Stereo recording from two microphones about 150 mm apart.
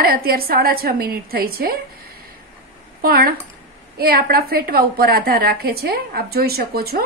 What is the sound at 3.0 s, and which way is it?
A woman's voice, 85° right.